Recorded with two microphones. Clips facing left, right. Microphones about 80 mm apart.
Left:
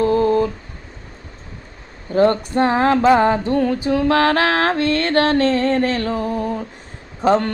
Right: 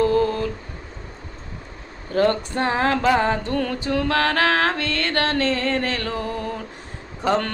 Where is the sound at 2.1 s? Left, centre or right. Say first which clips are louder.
Left 5 dB; left.